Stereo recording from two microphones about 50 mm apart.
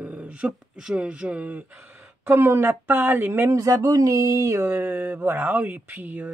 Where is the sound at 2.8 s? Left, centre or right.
Right.